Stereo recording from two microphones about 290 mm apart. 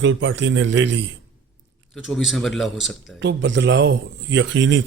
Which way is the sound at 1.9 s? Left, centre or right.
Centre.